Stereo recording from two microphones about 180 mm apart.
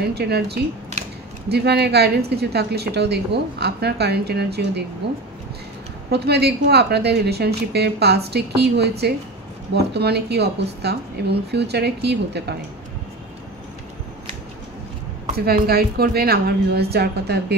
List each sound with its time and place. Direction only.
0.0 s a woman's voice: 65° right (ahead or behind)
6.0 s a woman's voice: 65° right (ahead or behind)
9.9 s speech: 65° right (ahead or behind)
15.3 s a woman's voice: 60° right (ahead or behind)